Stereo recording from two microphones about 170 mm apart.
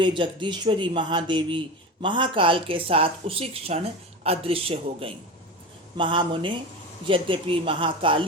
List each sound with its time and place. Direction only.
0.0 s speech: 30° right (ahead or behind)